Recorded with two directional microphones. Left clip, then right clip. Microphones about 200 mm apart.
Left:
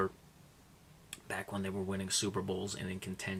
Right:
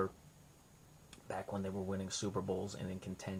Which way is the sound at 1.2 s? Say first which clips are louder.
Left 2 dB; 25° left (ahead or behind).